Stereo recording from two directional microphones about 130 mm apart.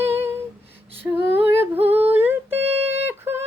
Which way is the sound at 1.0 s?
15° right (ahead or behind).